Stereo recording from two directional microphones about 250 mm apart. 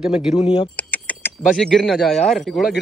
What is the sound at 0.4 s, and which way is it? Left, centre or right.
Speech, left.